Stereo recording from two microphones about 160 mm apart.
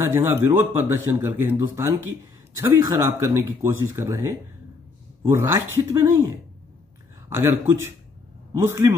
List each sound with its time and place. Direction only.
0.0 s speech: 15° right (ahead or behind)